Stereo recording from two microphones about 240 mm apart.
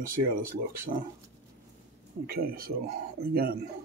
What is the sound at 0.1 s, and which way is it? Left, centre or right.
Speech, right.